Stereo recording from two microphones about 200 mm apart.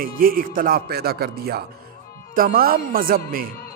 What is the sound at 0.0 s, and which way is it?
Speech, 45° right (ahead or behind).